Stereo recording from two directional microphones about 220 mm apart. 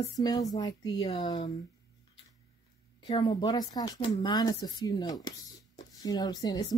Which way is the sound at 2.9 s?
20° left (ahead or behind).